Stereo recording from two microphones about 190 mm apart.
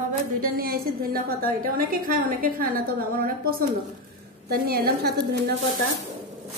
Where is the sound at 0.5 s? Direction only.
50° right (ahead or behind).